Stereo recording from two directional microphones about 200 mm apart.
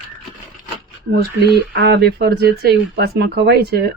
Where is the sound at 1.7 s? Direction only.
55° right (ahead or behind).